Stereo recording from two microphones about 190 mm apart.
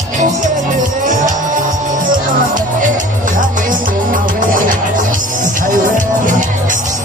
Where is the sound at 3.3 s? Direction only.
45° right (ahead or behind).